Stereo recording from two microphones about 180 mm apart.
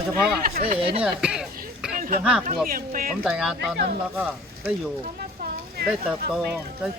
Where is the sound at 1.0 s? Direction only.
5° right (ahead or behind).